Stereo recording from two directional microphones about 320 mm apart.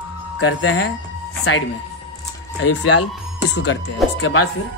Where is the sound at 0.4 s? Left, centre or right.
Left.